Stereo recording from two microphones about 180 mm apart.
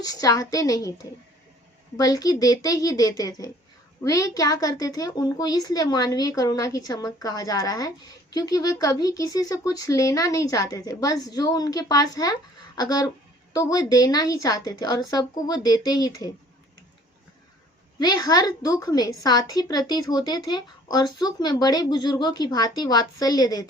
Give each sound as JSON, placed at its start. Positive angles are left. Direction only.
{"t": 0.0, "sound": "a woman's voice", "side_deg": 20}
{"t": 2.0, "sound": "a woman's voice", "side_deg": 20}
{"t": 18.0, "sound": "a woman's voice", "side_deg": 20}